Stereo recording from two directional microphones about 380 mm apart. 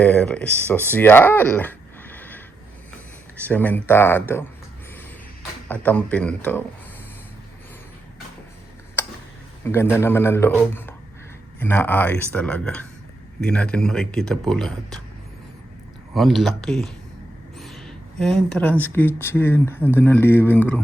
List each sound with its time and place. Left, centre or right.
0.0 s speech: centre
3.4 s speech: centre
5.8 s speech: centre
9.6 s speech: centre
16.1 s speech: centre